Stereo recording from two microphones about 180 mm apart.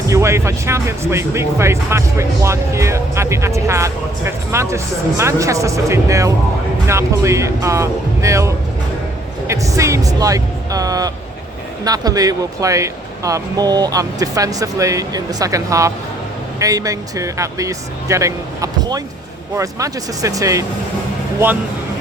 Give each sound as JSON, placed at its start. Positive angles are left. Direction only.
{"t": 0.1, "sound": "speech", "side_deg": -15}